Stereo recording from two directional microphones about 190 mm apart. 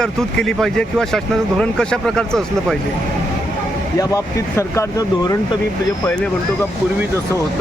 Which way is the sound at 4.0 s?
15° left (ahead or behind).